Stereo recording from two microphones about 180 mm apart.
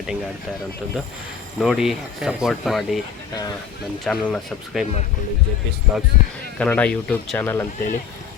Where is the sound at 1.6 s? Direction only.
Centre (ahead or behind).